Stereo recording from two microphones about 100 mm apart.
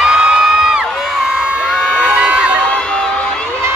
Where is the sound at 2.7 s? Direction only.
10° left (ahead or behind).